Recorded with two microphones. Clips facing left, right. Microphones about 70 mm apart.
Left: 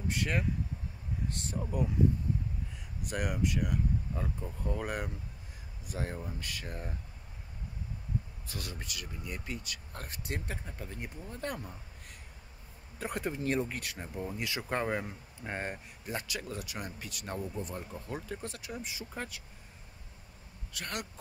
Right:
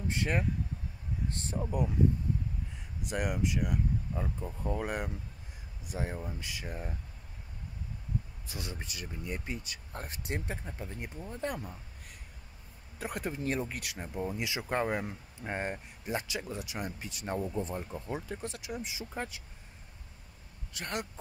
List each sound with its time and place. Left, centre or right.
0.1 s speech: right
1.6 s speech: centre
3.1 s speech: centre
8.5 s speech: centre
10.5 s speech: centre
13.0 s speech: centre
14.1 s speech: centre
17.9 s speech: centre
20.7 s speech: right